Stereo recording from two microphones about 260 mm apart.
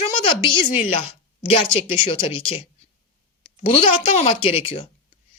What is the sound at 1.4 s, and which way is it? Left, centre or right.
A child's voice, left.